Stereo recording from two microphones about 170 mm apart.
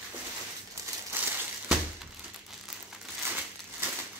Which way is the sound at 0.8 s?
20° right (ahead or behind).